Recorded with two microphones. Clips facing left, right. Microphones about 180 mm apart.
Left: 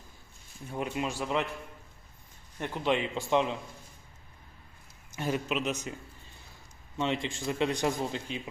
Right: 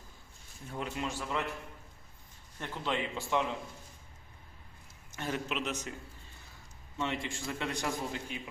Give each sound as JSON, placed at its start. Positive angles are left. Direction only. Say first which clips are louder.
{"t": 0.7, "sound": "a man's voice", "louder": "left 4 dB", "side_deg": 15}
{"t": 2.6, "sound": "a man's voice", "louder": "left 6 dB", "side_deg": 20}
{"t": 5.1, "sound": "a man's voice", "louder": "left 5 dB", "side_deg": 15}
{"t": 7.0, "sound": "a man's voice", "louder": "left 5 dB", "side_deg": 20}